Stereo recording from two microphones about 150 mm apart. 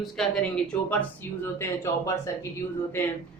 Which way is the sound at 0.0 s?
5° left (ahead or behind).